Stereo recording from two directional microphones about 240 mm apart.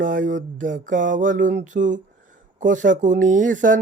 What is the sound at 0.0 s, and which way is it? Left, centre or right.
Speech, right.